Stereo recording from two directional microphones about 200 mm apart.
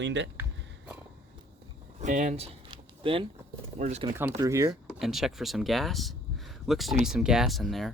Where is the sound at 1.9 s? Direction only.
40° right (ahead or behind).